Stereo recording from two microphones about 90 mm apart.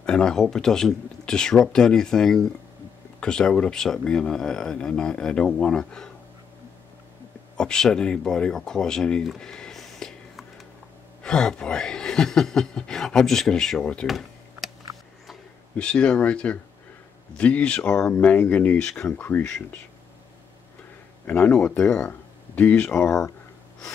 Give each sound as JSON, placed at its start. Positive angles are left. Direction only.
{"t": 0.0, "sound": "speech", "side_deg": 10}
{"t": 7.5, "sound": "speech", "side_deg": 10}
{"t": 15.7, "sound": "speech", "side_deg": 10}
{"t": 21.3, "sound": "speech", "side_deg": 25}